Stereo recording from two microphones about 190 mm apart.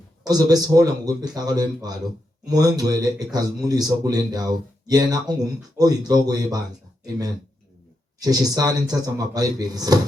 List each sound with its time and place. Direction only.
0.3 s a man's voice: 20° right (ahead or behind)
8.2 s a man's voice: 20° right (ahead or behind)